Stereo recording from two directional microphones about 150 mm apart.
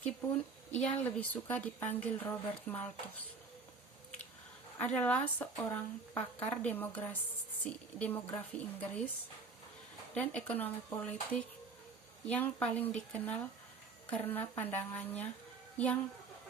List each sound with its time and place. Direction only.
0.7 s a woman's voice: 5° left (ahead or behind)
4.8 s a woman's voice: 10° left (ahead or behind)
6.1 s a woman's voice: 5° left (ahead or behind)
10.2 s a woman's voice: 10° left (ahead or behind)